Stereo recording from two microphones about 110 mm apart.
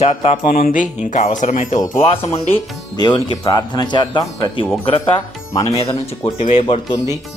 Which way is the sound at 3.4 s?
40° left (ahead or behind).